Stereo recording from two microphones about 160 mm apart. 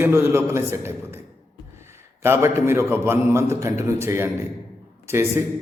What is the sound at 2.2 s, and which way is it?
A man's voice, 15° right (ahead or behind).